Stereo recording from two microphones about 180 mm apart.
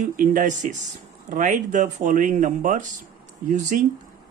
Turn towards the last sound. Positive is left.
turn(degrees=-45)  # may be behind; listen again after turning